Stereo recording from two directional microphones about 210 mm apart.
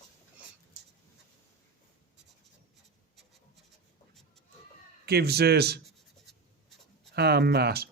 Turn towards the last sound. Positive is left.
turn(degrees=-50)  # may be behind; listen again after turning